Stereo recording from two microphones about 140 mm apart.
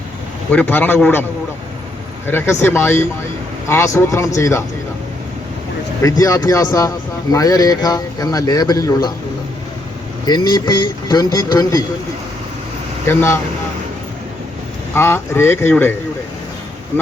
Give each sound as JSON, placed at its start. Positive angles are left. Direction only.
{"t": 0.5, "sound": "speech", "side_deg": 15}
{"t": 2.2, "sound": "speech", "side_deg": 15}
{"t": 6.0, "sound": "speech", "side_deg": 25}
{"t": 10.2, "sound": "speech", "side_deg": 30}
{"t": 13.1, "sound": "speech", "side_deg": 20}
{"t": 14.9, "sound": "speech", "side_deg": 15}